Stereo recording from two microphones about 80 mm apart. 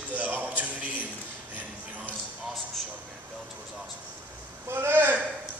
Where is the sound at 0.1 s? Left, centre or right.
Right.